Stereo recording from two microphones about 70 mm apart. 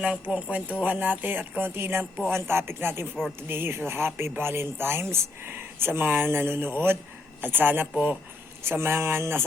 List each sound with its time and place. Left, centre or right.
0.0 s speech: centre; by 9.4 s right